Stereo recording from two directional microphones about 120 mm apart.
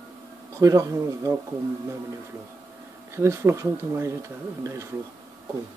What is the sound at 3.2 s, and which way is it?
Speech, 25° right (ahead or behind).